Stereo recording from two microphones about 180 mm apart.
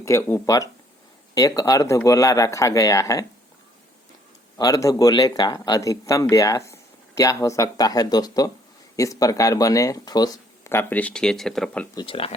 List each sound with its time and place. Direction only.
0.0 s speech: 15° left (ahead or behind)
4.5 s speech: 20° left (ahead or behind)
11.9 s speech: 30° left (ahead or behind)